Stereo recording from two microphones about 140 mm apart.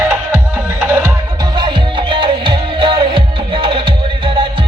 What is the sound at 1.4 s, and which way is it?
Music, 35° right (ahead or behind).